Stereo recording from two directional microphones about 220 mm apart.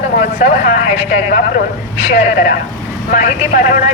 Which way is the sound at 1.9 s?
30° left (ahead or behind).